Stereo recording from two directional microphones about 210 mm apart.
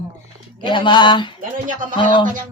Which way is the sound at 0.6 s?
20° left (ahead or behind).